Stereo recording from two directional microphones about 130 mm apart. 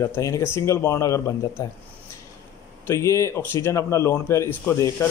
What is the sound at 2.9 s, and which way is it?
A man's voice, 25° left (ahead or behind).